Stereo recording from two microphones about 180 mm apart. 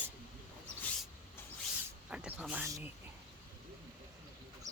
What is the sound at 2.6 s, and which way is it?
Speech, 15° right (ahead or behind).